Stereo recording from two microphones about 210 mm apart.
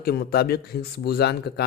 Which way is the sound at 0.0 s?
50° left (ahead or behind).